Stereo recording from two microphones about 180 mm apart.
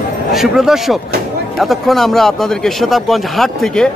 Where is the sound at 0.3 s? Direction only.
Centre (ahead or behind).